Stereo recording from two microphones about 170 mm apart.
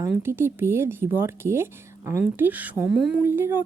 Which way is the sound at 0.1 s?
15° right (ahead or behind).